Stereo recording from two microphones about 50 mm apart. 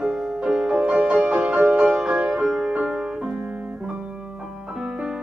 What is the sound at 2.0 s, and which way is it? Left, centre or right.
Music, right.